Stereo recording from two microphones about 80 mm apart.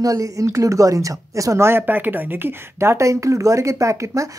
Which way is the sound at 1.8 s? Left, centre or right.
Right.